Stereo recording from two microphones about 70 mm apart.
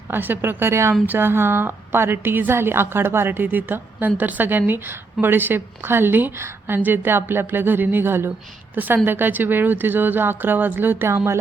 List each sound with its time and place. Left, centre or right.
0.1 s a woman's voice: right